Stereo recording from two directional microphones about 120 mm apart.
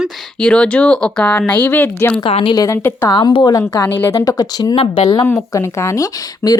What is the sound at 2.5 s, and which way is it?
Speech, 30° left (ahead or behind).